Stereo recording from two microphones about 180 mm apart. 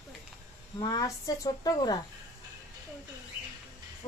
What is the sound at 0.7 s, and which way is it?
A woman's voice, 20° left (ahead or behind).